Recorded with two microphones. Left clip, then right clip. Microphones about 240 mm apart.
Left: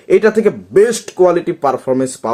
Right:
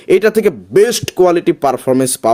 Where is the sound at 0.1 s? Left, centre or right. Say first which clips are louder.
Even; right.